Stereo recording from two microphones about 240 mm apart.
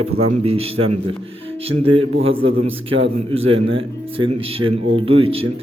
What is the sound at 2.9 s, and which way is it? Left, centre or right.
Speech, right.